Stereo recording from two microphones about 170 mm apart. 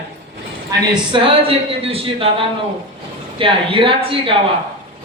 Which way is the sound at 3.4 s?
30° right (ahead or behind).